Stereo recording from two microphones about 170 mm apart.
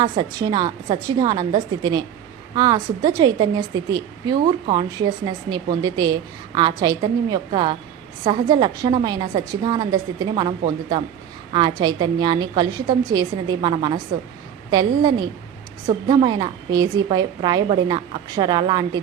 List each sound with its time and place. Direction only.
0.0 s a woman's voice: 25° right (ahead or behind)